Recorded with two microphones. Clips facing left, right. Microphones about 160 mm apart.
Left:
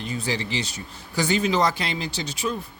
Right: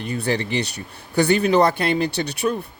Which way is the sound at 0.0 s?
60° right (ahead or behind).